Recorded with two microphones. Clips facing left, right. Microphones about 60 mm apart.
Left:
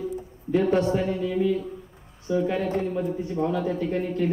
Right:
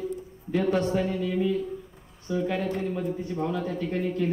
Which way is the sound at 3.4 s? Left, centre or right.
Left.